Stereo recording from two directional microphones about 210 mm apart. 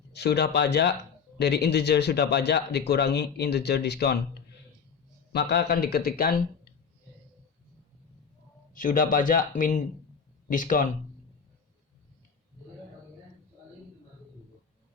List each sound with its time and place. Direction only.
0.1 s a man's voice: 50° left (ahead or behind)
5.3 s a man's voice: 50° left (ahead or behind)
8.7 s speech: 40° left (ahead or behind)